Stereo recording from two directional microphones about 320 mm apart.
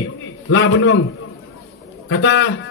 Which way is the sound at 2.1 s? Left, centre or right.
Left.